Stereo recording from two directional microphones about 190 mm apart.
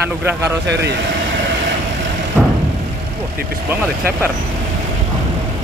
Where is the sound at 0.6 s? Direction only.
65° right (ahead or behind).